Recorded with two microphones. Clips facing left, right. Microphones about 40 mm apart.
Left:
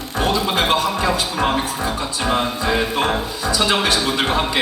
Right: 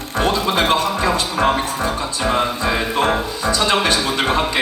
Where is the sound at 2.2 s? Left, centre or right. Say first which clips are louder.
Right 1 dB; centre.